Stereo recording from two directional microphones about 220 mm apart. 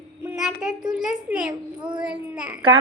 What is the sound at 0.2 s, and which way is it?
A child's voice, 5° right (ahead or behind).